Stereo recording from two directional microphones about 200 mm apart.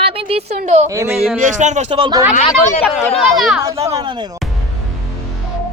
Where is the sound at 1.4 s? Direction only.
40° right (ahead or behind).